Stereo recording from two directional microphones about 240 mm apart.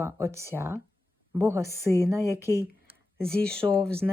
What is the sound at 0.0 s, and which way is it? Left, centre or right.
A woman's voice, centre.